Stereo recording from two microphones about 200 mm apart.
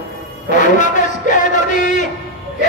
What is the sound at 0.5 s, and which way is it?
Music, 40° left (ahead or behind).